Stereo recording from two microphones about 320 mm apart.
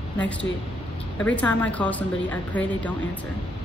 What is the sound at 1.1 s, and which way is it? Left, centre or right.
A woman's voice, centre.